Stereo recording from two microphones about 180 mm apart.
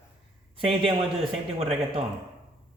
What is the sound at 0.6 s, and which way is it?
Speech, 30° right (ahead or behind).